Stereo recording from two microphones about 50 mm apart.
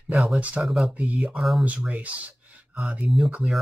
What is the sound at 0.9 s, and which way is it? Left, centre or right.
Speech, right.